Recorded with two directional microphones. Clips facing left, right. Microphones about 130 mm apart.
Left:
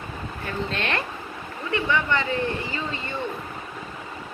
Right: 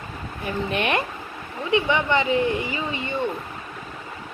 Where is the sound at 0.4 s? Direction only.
15° right (ahead or behind).